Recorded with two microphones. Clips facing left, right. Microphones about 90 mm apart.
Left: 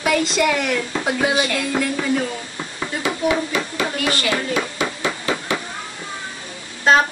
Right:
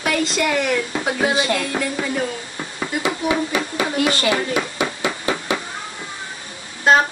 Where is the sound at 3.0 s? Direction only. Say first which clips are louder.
Left 1 dB; 20° right (ahead or behind).